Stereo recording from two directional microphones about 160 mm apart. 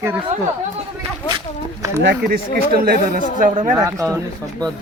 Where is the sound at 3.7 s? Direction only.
20° right (ahead or behind).